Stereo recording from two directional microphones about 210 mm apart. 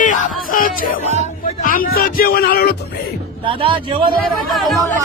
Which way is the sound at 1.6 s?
40° left (ahead or behind).